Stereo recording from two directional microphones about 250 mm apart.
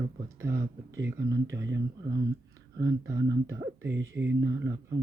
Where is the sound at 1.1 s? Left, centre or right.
Centre.